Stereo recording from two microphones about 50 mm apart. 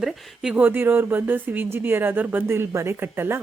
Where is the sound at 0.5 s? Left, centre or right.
Right.